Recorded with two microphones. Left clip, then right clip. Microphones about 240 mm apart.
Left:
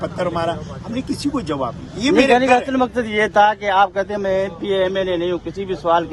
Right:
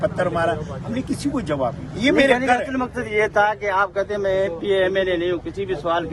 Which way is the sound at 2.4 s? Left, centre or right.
Left.